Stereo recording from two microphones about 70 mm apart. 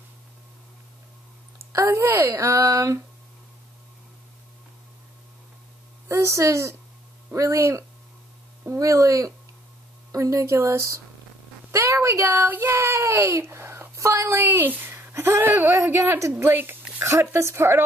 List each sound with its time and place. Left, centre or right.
1.7 s speech: right
6.0 s a woman's voice: right